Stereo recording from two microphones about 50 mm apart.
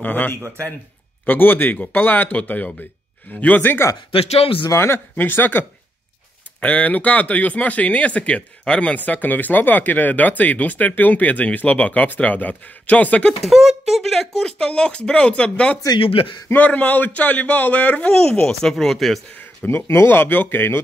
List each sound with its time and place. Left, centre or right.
0.0 s speech: left
4.7 s speech: left
5.1 s speech: left
6.6 s speech: left
13.5 s speech: centre
14.0 s speech: centre
14.4 s speech: centre
18.1 s speech: centre
19.6 s speech: left